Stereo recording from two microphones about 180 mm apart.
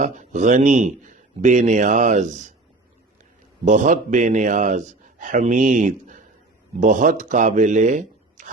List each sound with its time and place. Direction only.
0.0 s a man's voice: 45° right (ahead or behind)
3.7 s a man's voice: 45° right (ahead or behind)